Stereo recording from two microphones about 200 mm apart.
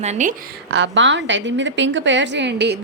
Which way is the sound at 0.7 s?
65° right (ahead or behind).